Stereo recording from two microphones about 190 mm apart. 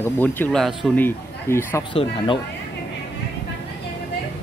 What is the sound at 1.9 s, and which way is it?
Speech, 25° left (ahead or behind).